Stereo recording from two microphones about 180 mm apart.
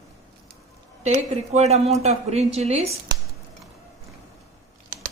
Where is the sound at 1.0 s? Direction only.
40° right (ahead or behind).